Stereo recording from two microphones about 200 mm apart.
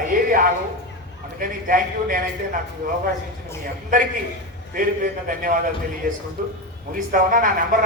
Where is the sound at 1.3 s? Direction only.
45° right (ahead or behind).